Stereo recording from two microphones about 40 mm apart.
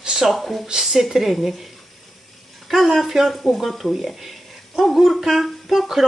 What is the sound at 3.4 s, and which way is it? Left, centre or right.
Speech, centre.